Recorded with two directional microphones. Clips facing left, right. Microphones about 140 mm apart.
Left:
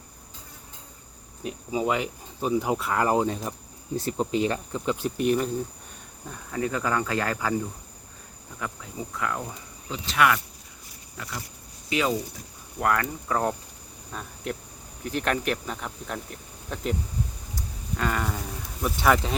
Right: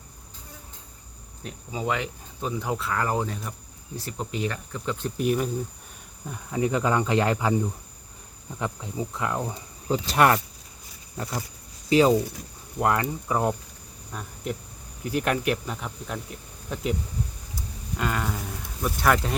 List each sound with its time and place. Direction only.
1.5 s speech: 10° left (ahead or behind)
5.0 s speech: centre (ahead or behind)
6.3 s speech: 15° right (ahead or behind)
8.5 s speech: 25° right (ahead or behind)
9.9 s speech: 40° right (ahead or behind)
12.8 s speech: 20° right (ahead or behind); by 16.9 s 5° right (ahead or behind)
17.9 s speech: 5° right (ahead or behind)